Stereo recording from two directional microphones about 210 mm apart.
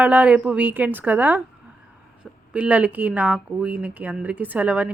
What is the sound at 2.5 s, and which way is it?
Speech, 5° right (ahead or behind).